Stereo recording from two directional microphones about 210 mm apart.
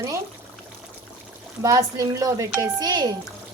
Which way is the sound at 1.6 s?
15° right (ahead or behind).